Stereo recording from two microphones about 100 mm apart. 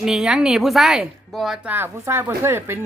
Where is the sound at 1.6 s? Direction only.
20° right (ahead or behind).